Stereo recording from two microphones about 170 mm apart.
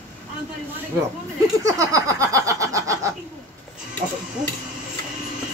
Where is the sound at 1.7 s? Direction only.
20° right (ahead or behind).